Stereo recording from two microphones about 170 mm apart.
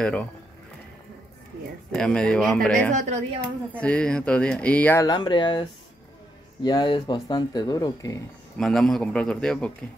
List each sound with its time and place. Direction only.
0.0 s speech: 5° left (ahead or behind)
2.0 s a man's voice: 5° left (ahead or behind)
2.9 s a woman's voice: 45° right (ahead or behind)
3.7 s speech: 5° left (ahead or behind)
5.0 s speech: 25° left (ahead or behind)
8.5 s a man's voice: 5° left (ahead or behind)